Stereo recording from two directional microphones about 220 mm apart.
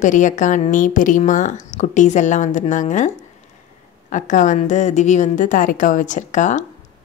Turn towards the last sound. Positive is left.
turn(degrees=35)  # may be behind; listen again after turning